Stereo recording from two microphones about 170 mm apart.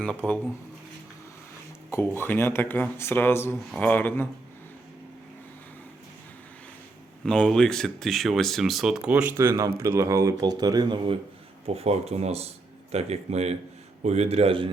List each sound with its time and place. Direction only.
0.0 s speech: 5° left (ahead or behind)
1.9 s speech: 15° left (ahead or behind)
7.3 s speech: 5° left (ahead or behind); by 11.2 s 25° right (ahead or behind)
11.6 s speech: 35° right (ahead or behind)